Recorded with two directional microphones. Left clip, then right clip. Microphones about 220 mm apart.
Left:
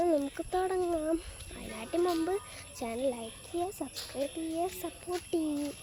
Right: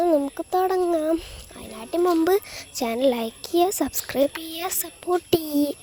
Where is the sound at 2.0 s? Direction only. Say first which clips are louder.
Right 16 dB; 45° right (ahead or behind).